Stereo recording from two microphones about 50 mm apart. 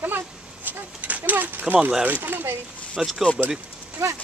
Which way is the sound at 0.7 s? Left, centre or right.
Right.